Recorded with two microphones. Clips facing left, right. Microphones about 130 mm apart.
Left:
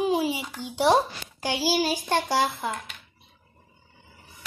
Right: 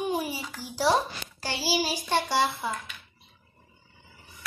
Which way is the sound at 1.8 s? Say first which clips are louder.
Left 2 dB; 50° left (ahead or behind).